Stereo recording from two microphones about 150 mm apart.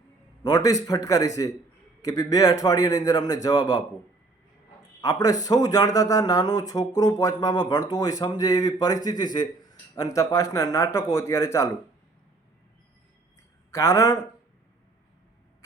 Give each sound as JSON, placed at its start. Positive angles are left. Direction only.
{"t": 0.4, "sound": "a man's voice", "side_deg": 25}
{"t": 4.9, "sound": "a man's voice", "side_deg": 25}
{"t": 13.7, "sound": "a man's voice", "side_deg": 20}